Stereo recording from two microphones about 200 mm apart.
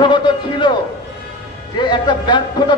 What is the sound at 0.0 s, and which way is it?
Speech, 25° left (ahead or behind).